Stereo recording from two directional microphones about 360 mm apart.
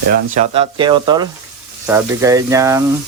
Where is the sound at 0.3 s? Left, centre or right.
Centre.